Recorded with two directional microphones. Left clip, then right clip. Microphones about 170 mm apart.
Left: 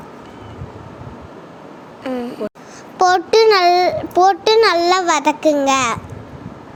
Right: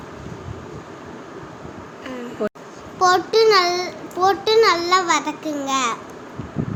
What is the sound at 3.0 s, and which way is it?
A child's voice, 45° left (ahead or behind).